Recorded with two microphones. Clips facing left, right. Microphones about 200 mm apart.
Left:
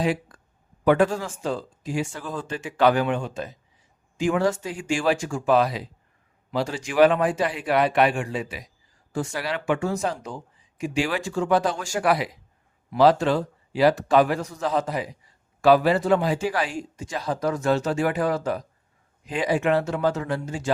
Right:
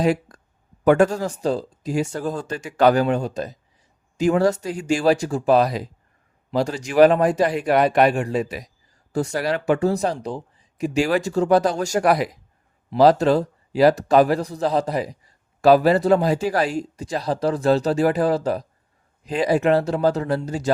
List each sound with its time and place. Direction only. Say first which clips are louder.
0.0 s speech: right 4 dB; 40° right (ahead or behind)